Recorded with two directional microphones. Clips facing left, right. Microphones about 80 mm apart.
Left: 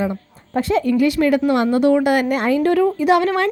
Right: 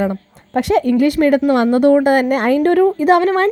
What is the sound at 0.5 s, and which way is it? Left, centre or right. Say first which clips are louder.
A woman's voice: right 3 dB; right.